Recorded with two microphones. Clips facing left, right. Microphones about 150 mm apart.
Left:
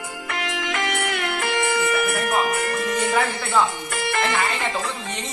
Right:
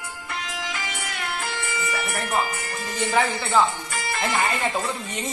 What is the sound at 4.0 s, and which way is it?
Music, 60° left (ahead or behind).